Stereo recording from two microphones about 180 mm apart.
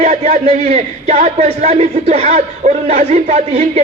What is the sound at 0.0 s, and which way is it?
Speech, 35° right (ahead or behind).